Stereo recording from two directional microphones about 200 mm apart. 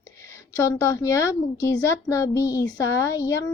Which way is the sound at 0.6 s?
15° left (ahead or behind).